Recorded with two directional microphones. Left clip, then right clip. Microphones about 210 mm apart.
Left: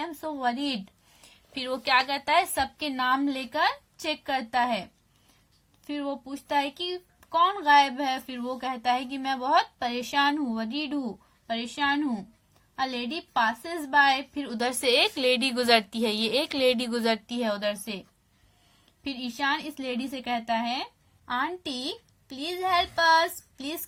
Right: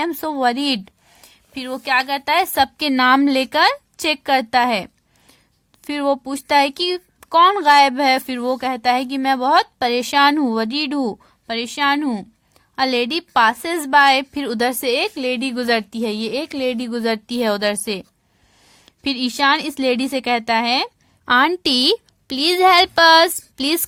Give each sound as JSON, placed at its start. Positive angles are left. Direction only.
{"t": 0.0, "sound": "a woman's voice", "side_deg": -45}